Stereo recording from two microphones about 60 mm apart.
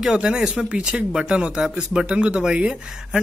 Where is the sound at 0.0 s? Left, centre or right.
Centre.